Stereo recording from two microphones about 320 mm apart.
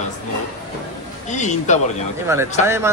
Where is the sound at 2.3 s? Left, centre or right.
Centre.